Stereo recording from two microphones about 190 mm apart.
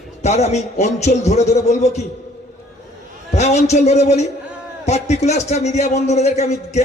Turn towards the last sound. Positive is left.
turn(degrees=35)  # may be behind; listen again after turning